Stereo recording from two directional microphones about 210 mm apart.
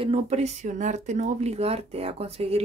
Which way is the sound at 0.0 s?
30° right (ahead or behind).